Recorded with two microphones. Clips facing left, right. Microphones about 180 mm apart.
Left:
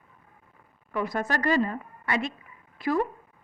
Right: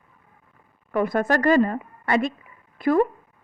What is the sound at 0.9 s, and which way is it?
A woman's voice, 55° right (ahead or behind).